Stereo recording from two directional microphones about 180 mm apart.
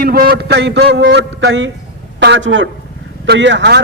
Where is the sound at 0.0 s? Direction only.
55° right (ahead or behind).